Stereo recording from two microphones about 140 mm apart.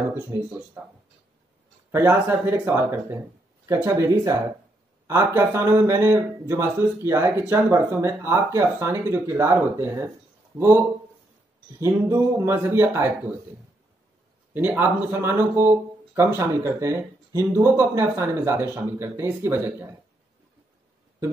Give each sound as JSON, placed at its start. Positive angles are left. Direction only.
{"t": 0.1, "sound": "speech", "side_deg": -15}
{"t": 1.9, "sound": "speech", "side_deg": -15}
{"t": 11.8, "sound": "speech", "side_deg": -20}
{"t": 14.5, "sound": "speech", "side_deg": -15}